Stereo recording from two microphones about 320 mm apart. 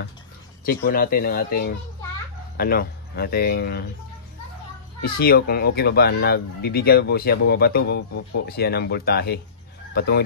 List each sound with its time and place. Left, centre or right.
0.7 s speech: left
5.0 s speech: left